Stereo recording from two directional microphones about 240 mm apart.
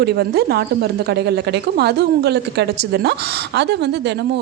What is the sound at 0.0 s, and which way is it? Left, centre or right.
A woman's voice, right.